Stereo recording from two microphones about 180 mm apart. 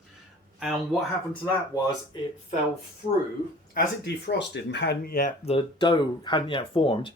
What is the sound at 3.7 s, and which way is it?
Speech, 65° left (ahead or behind).